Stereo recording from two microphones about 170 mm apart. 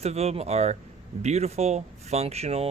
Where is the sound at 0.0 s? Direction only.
40° right (ahead or behind).